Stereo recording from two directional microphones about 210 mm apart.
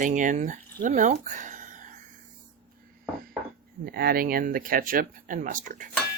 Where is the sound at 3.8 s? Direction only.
45° right (ahead or behind).